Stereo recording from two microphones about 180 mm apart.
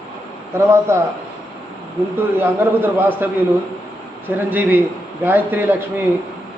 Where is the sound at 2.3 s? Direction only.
10° right (ahead or behind).